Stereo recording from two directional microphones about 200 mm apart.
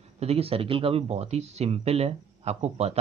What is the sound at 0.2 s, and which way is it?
Speech, 30° right (ahead or behind).